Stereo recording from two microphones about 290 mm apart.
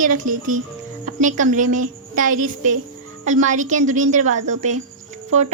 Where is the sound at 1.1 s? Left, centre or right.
Right.